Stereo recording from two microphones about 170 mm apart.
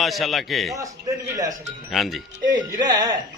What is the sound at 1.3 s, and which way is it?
Speech, 20° right (ahead or behind).